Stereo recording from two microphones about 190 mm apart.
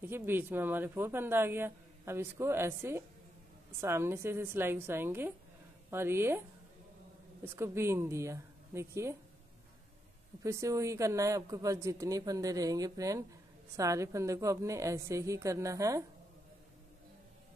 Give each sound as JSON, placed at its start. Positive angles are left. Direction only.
{"t": 0.0, "sound": "speech", "side_deg": -10}
{"t": 7.4, "sound": "speech", "side_deg": -15}
{"t": 10.4, "sound": "speech", "side_deg": -15}